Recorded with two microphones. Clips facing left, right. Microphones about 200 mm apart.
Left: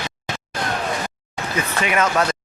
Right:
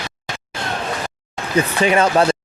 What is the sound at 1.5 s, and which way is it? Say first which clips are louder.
Speech: right 6 dB; 30° right (ahead or behind).